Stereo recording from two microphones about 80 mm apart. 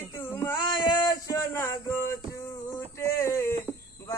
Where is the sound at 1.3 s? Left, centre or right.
Left.